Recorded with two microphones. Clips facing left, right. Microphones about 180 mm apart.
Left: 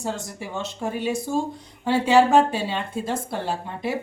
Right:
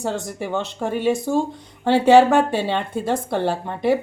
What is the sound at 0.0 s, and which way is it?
A woman's voice, 65° right (ahead or behind).